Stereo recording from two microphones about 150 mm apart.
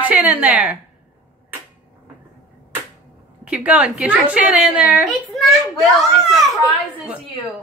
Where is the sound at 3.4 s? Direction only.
10° right (ahead or behind).